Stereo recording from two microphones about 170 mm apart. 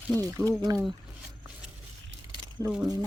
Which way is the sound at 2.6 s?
5° right (ahead or behind).